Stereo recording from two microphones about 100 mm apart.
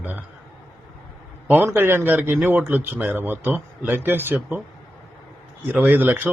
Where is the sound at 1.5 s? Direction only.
20° right (ahead or behind).